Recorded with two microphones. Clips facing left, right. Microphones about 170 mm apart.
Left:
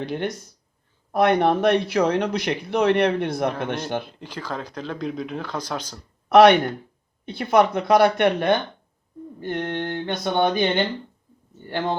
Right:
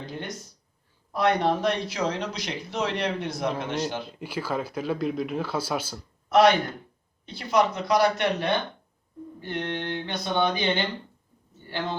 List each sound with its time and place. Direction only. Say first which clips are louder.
0.0 s speech: left 9 dB; 70° left (ahead or behind)
1.1 s speech: left 5 dB; 60° left (ahead or behind)
4.2 s speech: right 2 dB; 10° right (ahead or behind)
6.2 s speech: left 6 dB; 65° left (ahead or behind)
9.4 s a sound: left 4 dB; 50° left (ahead or behind)